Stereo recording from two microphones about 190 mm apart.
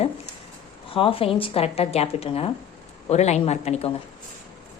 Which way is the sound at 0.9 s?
30° left (ahead or behind).